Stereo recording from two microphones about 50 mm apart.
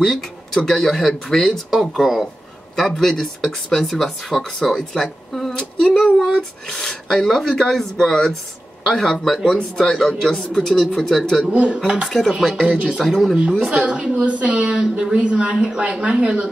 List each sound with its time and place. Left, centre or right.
0.0 s speech: centre
2.7 s speech: centre
5.6 s a sound: centre
6.7 s speech: centre
10.2 s speech: centre
11.5 s a woman's voice: right
12.1 s speech: centre
12.4 s a woman's voice: right
13.1 s speech: centre
13.4 s a woman's voice: centre